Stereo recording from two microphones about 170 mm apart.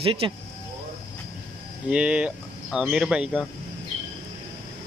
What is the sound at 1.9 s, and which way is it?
Speech, 5° right (ahead or behind).